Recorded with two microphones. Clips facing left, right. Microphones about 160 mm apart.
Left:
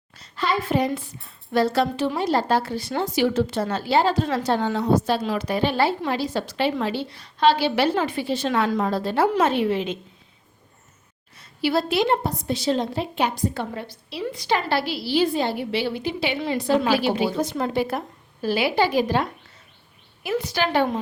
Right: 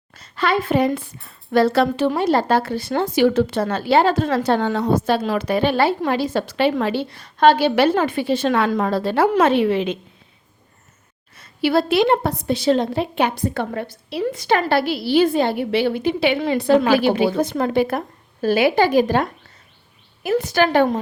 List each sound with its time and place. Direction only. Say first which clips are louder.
0.1 s a woman's voice: right 4 dB; 55° right (ahead or behind)
11.3 s a woman's voice: right 4 dB; 60° right (ahead or behind)
20.3 s a woman's voice: right 6 dB; 50° right (ahead or behind)